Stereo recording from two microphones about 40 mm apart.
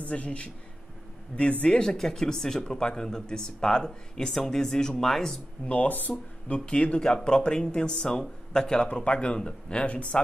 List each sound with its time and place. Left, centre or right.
0.1 s speech: left
1.8 s speech: centre
5.7 s speech: left; by 8.8 s centre
8.9 s speech: left